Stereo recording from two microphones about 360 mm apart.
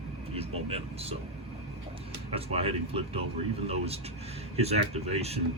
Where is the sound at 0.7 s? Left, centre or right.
Centre.